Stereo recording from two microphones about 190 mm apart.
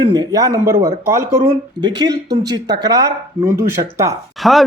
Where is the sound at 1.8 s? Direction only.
20° right (ahead or behind).